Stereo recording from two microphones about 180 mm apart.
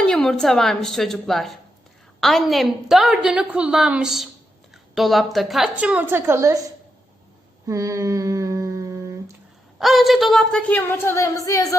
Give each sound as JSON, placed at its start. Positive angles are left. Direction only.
{"t": 0.0, "sound": "a woman's voice", "side_deg": 5}
{"t": 7.7, "sound": "humming", "side_deg": -20}
{"t": 9.7, "sound": "a woman's voice", "side_deg": 0}